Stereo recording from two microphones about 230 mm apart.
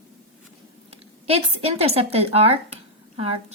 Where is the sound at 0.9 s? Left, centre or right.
Right.